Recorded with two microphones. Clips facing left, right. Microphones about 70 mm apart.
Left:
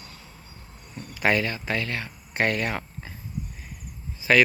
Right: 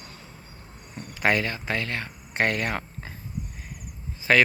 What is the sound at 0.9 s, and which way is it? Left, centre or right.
Cricket, centre.